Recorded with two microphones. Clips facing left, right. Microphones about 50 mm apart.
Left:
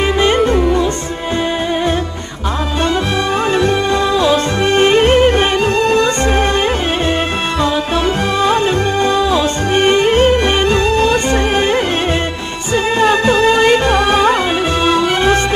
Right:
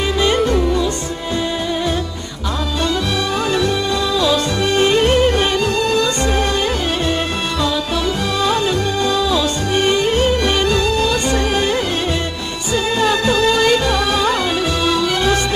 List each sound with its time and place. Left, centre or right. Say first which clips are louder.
0.5 s music: left 3 dB; left
3.5 s music: left 5 dB; left
8.4 s music: left 3 dB; left